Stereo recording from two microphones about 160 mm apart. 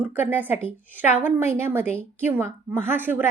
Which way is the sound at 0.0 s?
10° right (ahead or behind).